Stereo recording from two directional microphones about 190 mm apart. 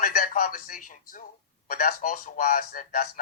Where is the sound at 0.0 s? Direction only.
45° left (ahead or behind).